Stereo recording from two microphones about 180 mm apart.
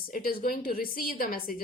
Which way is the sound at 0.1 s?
55° left (ahead or behind).